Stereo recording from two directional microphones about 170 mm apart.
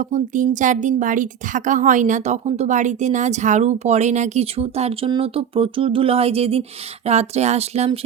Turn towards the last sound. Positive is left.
turn(degrees=-40)  # may be behind; listen again after turning